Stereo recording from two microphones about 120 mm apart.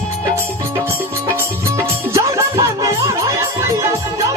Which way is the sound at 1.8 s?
25° right (ahead or behind).